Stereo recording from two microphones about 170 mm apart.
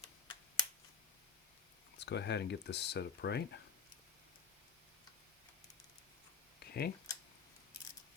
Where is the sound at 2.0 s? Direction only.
85° left.